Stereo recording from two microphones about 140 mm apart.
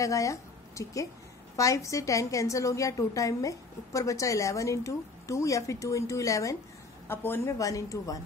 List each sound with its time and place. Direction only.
0.0 s a woman's voice: 25° left (ahead or behind)